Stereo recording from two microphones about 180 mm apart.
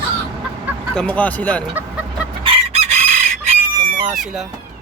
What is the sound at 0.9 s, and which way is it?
Speech, 5° left (ahead or behind).